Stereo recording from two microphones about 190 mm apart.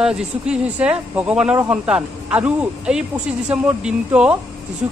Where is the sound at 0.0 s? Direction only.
5° right (ahead or behind).